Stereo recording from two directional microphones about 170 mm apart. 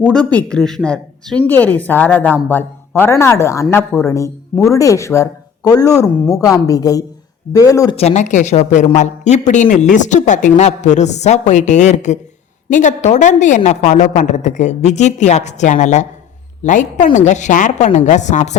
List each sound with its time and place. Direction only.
0.0 s speech: 5° left (ahead or behind)
7.9 s a man's voice: 40° left (ahead or behind)